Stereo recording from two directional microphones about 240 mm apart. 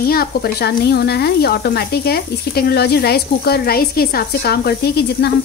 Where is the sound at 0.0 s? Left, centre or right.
Left.